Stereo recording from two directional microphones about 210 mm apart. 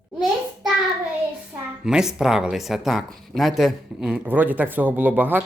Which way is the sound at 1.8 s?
5° right (ahead or behind).